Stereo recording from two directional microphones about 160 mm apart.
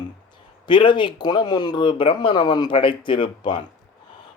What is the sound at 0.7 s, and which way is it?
Speech, 30° left (ahead or behind).